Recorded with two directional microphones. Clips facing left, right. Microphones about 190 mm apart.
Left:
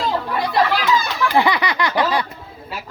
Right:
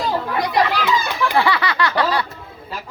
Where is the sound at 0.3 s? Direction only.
15° right (ahead or behind).